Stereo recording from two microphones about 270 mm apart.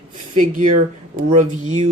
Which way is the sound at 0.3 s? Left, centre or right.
Right.